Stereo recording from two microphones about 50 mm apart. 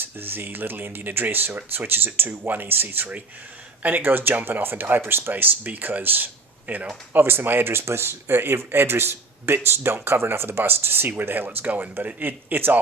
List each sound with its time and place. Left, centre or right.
0.0 s speech: right
7.1 s speech: right